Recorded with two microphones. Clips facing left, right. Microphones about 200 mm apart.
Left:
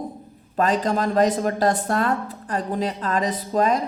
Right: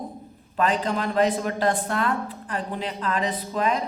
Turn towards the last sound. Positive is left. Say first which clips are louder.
# left 4 dB
turn(degrees=40)  # may be behind; listen again after turning